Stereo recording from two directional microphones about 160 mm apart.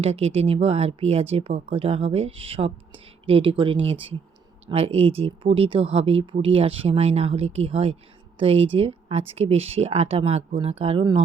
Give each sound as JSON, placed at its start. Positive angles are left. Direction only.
{"t": 0.0, "sound": "speech", "side_deg": -40}